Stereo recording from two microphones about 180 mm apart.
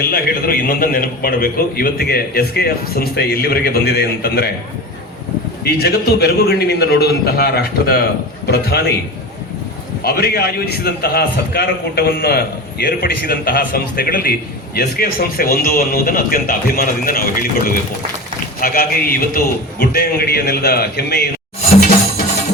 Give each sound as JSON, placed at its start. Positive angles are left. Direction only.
{"t": 0.0, "sound": "a man's voice", "side_deg": 55}
{"t": 5.6, "sound": "a man's voice", "side_deg": 60}
{"t": 10.0, "sound": "a man's voice", "side_deg": 60}